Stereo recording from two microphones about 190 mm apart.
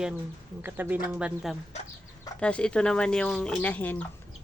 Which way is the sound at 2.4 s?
5° left (ahead or behind).